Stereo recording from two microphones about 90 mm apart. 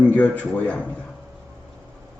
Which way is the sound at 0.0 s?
15° left (ahead or behind).